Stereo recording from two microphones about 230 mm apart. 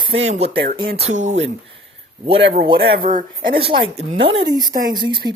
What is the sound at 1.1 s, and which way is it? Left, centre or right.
Speech, right.